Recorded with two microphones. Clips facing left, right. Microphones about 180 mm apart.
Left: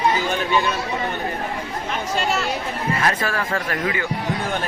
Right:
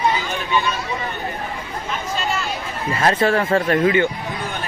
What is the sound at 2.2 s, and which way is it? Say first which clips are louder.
Speech: left 3 dB; 75° left (ahead or behind).